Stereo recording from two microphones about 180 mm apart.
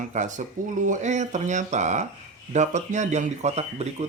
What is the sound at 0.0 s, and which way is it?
Speech, 45° right (ahead or behind).